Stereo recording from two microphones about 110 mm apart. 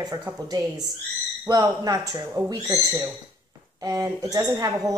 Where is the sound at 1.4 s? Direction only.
35° right (ahead or behind).